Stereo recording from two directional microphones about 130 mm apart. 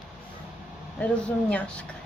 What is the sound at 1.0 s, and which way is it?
Speech, 10° left (ahead or behind).